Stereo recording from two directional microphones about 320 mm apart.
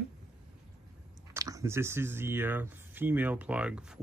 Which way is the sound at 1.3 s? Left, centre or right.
Centre.